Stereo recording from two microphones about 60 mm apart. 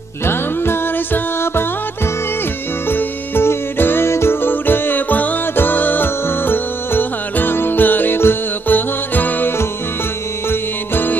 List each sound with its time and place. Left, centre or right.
0.2 s music: left
2.9 s music: left
10.5 s music: left